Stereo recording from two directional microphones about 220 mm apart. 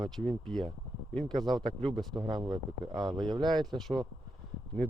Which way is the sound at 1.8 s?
25° right (ahead or behind).